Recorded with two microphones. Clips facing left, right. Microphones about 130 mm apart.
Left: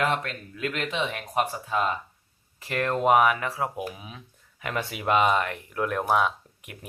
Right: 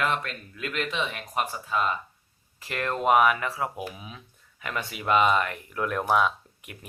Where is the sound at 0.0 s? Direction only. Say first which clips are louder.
Left 2 dB; 50° left (ahead or behind).